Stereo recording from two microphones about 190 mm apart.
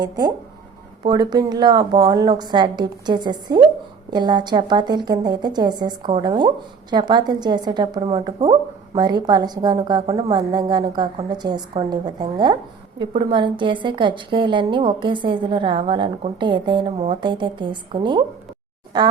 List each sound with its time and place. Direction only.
0.0 s a woman's voice: 20° right (ahead or behind)